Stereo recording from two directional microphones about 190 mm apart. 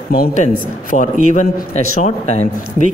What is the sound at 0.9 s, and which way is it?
A man's voice, 40° left (ahead or behind).